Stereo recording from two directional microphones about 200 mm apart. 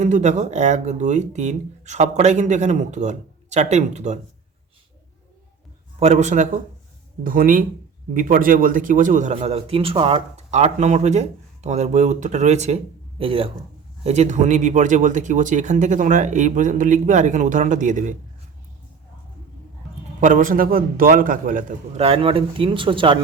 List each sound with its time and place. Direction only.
0.0 s a man's voice: 35° right (ahead or behind)
6.0 s a man's voice: 35° right (ahead or behind)
20.2 s a man's voice: 40° right (ahead or behind); by 23.1 s 25° right (ahead or behind)